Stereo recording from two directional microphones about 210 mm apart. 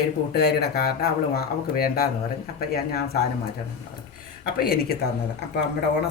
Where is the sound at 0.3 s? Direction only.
50° left (ahead or behind).